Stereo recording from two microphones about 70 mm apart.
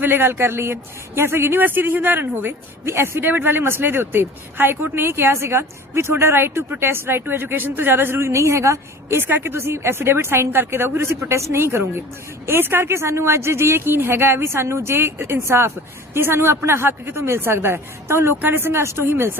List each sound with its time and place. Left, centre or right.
0.0 s speech: right